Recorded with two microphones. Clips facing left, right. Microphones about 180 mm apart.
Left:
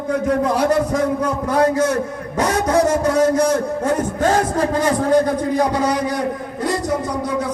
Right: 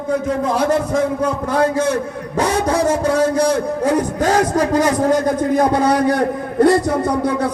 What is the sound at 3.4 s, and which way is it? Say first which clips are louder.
A man's voice: right 1 dB; 35° right (ahead or behind).